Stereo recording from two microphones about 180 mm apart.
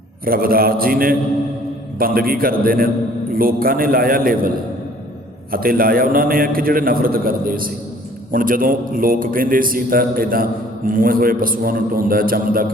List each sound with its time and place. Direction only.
0.3 s a man's voice: 55° right (ahead or behind)